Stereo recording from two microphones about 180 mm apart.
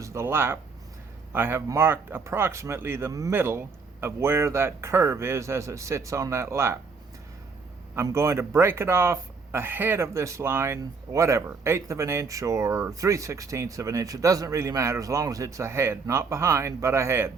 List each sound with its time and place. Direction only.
0.0 s a man's voice: 15° right (ahead or behind)
7.9 s a man's voice: 15° right (ahead or behind)